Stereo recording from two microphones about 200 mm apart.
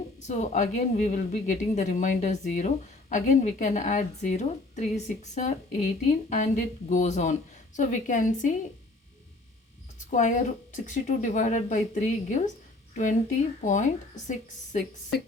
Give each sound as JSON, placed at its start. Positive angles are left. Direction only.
{"t": 0.2, "sound": "a woman's voice", "side_deg": 35}
{"t": 10.0, "sound": "a woman's voice", "side_deg": 40}